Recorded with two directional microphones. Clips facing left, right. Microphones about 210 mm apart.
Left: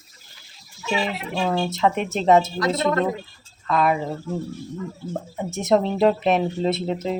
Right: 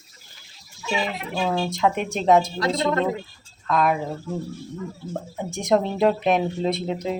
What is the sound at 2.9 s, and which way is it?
Speech, 25° right (ahead or behind).